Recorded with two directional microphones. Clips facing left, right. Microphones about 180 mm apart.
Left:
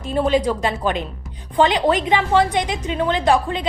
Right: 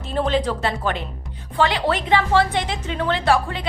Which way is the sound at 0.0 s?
10° left (ahead or behind).